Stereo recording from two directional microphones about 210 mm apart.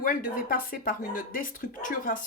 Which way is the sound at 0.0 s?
40° left (ahead or behind).